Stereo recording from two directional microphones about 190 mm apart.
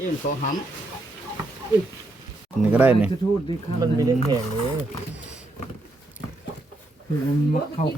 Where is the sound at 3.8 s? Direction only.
20° right (ahead or behind).